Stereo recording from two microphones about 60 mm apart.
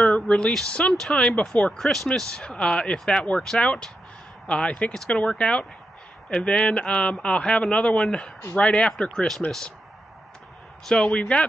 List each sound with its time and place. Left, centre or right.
0.0 s a sound: centre
0.7 s a man's voice: centre
1.8 s a man's voice: centre
10.9 s a man's voice: centre